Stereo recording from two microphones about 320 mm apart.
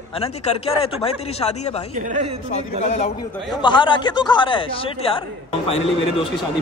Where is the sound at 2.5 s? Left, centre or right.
Left.